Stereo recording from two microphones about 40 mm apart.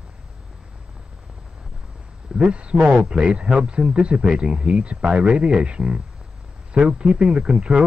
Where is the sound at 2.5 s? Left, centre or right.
Right.